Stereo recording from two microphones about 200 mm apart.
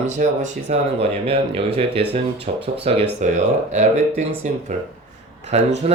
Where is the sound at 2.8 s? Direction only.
30° right (ahead or behind).